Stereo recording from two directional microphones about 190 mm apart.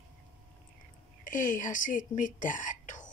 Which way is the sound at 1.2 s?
45° left (ahead or behind).